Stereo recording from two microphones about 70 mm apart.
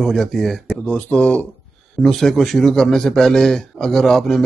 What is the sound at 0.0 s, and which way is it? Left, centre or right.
Speech, centre.